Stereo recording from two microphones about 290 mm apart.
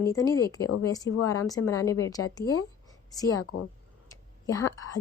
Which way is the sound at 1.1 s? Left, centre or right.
Left.